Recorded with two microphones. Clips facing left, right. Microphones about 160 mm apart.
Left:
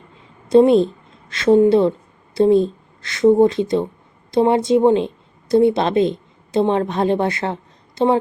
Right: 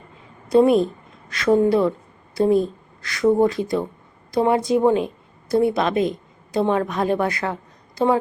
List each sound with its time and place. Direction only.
0.5 s a woman's voice: 25° left (ahead or behind)